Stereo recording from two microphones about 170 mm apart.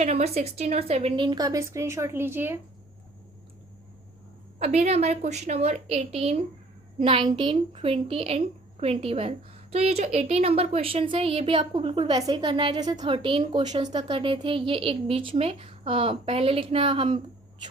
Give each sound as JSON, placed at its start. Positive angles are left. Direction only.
{"t": 0.0, "sound": "a woman's voice", "side_deg": -40}
{"t": 4.6, "sound": "a woman's voice", "side_deg": -40}